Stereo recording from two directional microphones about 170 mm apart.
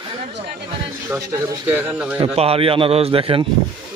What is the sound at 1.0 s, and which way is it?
Speech, 15° right (ahead or behind).